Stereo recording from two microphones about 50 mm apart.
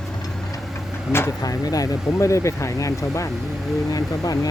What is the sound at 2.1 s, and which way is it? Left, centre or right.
Speech, left.